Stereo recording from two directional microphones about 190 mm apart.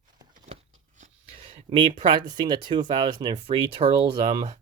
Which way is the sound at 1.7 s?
25° right (ahead or behind).